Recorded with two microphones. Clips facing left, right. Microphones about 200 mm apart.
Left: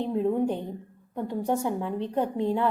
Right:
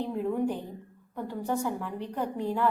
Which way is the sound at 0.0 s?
20° left (ahead or behind).